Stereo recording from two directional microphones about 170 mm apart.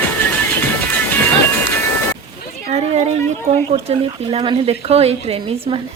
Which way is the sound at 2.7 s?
40° right (ahead or behind).